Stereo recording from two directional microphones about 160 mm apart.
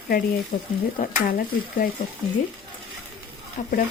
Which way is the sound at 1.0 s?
60° left (ahead or behind).